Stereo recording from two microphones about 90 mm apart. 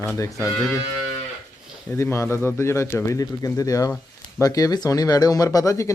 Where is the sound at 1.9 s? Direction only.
35° left (ahead or behind).